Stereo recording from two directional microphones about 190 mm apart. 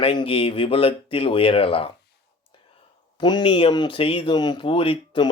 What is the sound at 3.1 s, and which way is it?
Speech, 25° left (ahead or behind).